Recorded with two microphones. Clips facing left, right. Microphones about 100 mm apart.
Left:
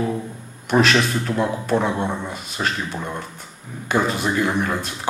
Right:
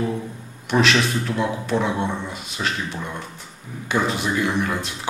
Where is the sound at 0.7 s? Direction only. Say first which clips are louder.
Left 2 dB; 45° left (ahead or behind).